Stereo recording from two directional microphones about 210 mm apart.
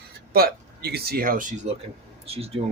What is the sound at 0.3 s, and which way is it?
Speech, 50° right (ahead or behind).